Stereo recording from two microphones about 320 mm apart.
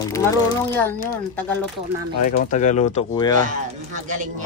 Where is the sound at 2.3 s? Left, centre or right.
Left.